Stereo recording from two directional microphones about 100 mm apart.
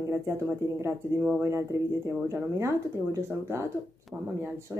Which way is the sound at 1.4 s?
30° right (ahead or behind).